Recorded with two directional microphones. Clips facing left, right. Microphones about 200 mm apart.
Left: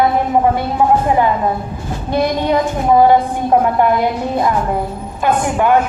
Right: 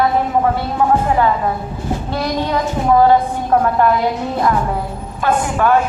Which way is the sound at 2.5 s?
15° left (ahead or behind).